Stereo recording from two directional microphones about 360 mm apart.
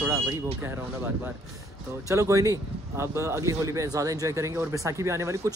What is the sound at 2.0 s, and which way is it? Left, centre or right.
Speech, centre.